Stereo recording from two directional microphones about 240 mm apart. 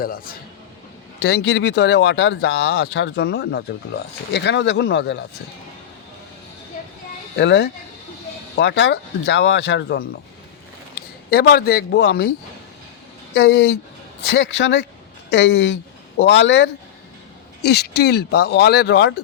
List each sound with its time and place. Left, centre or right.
0.0 s speech: left
7.3 s speech: left
11.3 s speech: left
13.3 s speech: left